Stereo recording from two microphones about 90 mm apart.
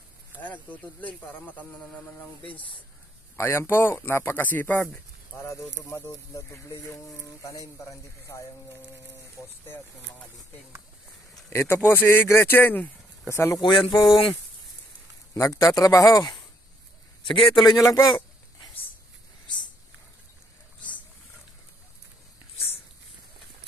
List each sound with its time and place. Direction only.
0.4 s speech: 20° left (ahead or behind)
3.3 s speech: 30° left (ahead or behind)
5.3 s speech: 35° left (ahead or behind)
11.5 s speech: 30° left (ahead or behind)
13.3 s speech: 30° left (ahead or behind)
13.6 s speech: 60° left (ahead or behind)
15.3 s speech: 35° left (ahead or behind)
17.2 s a man's voice: 65° left (ahead or behind)
17.6 s speech: 40° left (ahead or behind)